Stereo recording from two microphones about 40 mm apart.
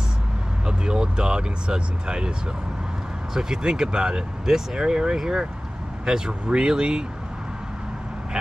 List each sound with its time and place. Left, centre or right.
0.7 s speech: right
3.3 s speech: centre